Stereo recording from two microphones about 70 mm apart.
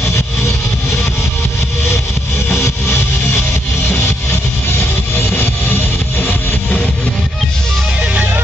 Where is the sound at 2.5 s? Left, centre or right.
Left.